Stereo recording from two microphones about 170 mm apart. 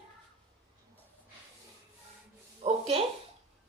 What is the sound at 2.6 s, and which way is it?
Speech, 35° right (ahead or behind).